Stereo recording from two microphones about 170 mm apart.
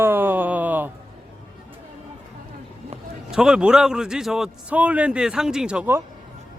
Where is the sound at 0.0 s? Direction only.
10° right (ahead or behind).